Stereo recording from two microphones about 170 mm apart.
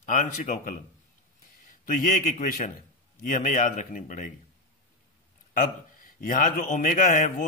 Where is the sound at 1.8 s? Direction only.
55° left (ahead or behind).